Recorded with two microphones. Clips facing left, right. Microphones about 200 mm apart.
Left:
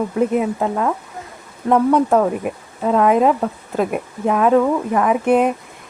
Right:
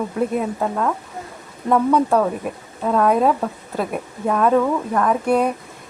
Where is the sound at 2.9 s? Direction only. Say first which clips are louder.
Left 2 dB; 5° left (ahead or behind).